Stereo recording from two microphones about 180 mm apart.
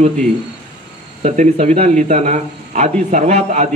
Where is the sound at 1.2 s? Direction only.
40° right (ahead or behind).